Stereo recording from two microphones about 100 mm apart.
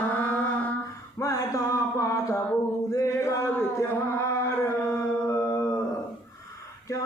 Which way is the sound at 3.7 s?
25° left (ahead or behind).